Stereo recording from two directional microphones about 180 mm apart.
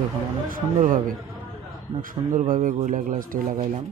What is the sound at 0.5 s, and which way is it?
Speech, 50° right (ahead or behind).